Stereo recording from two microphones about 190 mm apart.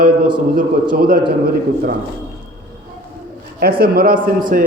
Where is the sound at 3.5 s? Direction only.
50° right (ahead or behind).